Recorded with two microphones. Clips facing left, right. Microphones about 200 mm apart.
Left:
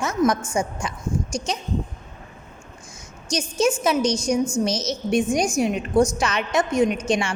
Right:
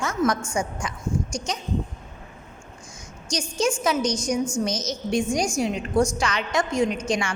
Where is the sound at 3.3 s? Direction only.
25° left (ahead or behind).